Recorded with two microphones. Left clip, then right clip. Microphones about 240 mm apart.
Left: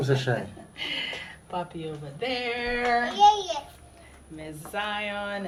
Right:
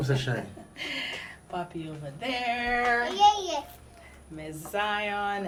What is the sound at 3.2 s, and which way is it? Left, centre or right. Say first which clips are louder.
Speech: left 3 dB; right.